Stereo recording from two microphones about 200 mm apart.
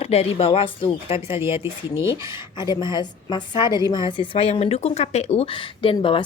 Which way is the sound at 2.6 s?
20° left (ahead or behind).